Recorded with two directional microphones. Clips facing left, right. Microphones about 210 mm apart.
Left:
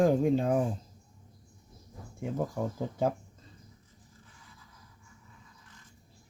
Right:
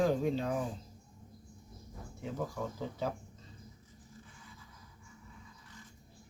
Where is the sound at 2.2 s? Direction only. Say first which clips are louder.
Left 5 dB; 50° left (ahead or behind).